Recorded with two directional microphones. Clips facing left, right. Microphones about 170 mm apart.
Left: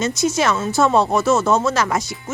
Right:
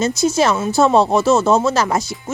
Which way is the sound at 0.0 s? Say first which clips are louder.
Right 3 dB; 30° right (ahead or behind).